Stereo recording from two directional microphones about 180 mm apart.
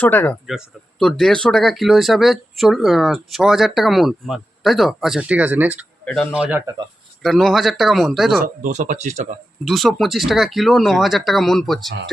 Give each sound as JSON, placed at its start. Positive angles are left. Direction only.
{"t": 0.0, "sound": "speech", "side_deg": 10}
{"t": 8.4, "sound": "speech", "side_deg": -45}
{"t": 9.6, "sound": "speech", "side_deg": 0}